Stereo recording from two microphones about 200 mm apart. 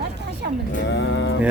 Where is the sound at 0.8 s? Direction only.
60° left (ahead or behind).